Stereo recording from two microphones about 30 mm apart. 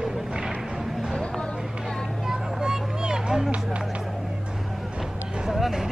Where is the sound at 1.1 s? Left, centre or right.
Left.